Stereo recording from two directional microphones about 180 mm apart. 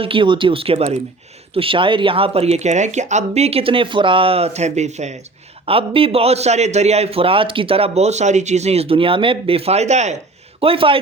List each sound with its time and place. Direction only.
0.0 s a man's voice: 30° right (ahead or behind)